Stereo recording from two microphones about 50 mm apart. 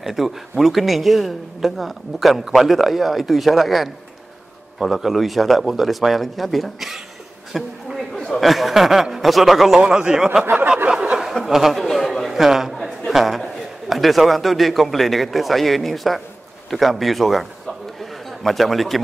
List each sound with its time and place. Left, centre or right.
0.0 s speech: centre
7.5 s a sound: centre
8.4 s speech: centre
9.8 s speech: centre
11.4 s a man's voice: centre